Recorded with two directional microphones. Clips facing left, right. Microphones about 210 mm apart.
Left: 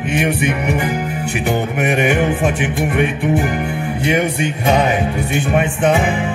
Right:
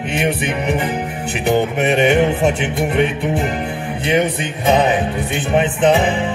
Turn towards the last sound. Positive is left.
turn(degrees=-20)  # may be behind; listen again after turning